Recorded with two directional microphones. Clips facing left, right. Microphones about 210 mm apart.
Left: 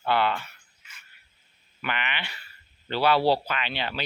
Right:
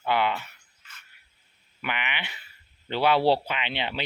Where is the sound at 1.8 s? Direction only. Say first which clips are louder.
Left 1 dB; 15° right (ahead or behind).